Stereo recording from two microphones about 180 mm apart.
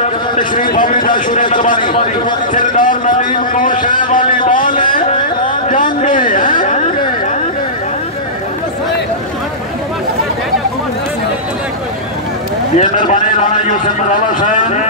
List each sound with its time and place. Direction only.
0.0 s a man's voice: 45° left (ahead or behind)
6.0 s a man's voice: 45° left (ahead or behind)
12.7 s a man's voice: 45° left (ahead or behind)